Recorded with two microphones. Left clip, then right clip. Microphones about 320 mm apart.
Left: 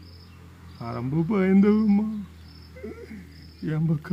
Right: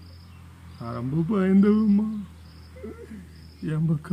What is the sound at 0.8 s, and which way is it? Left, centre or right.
Insect, centre.